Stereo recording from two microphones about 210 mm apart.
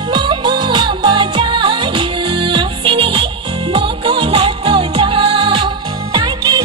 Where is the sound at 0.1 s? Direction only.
20° right (ahead or behind).